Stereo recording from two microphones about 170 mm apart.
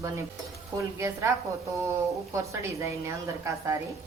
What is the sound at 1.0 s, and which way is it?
Speech, 15° right (ahead or behind).